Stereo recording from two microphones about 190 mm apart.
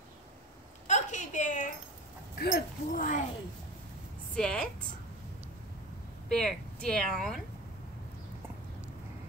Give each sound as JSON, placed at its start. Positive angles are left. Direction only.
{"t": 0.8, "sound": "a sound", "side_deg": 40}
{"t": 2.3, "sound": "speech", "side_deg": 55}
{"t": 2.9, "sound": "a child's voice", "side_deg": 45}
{"t": 4.4, "sound": "a woman's voice", "side_deg": 5}
{"t": 6.2, "sound": "speech", "side_deg": 5}